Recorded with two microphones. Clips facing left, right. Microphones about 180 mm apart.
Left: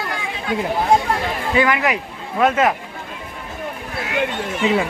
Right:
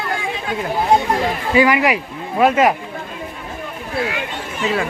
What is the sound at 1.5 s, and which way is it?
Speech, 10° right (ahead or behind).